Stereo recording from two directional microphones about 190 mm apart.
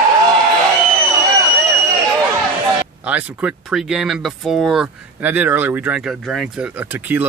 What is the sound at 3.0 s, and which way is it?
Speech, 10° right (ahead or behind).